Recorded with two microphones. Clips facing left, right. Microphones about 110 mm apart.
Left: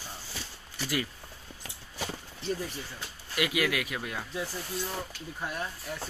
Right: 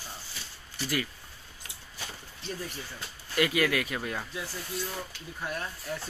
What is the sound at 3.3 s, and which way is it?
Speech, 10° left (ahead or behind).